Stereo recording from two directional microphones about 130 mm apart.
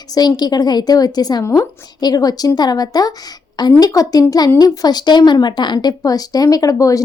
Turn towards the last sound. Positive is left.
turn(degrees=25)  # may be behind; listen again after turning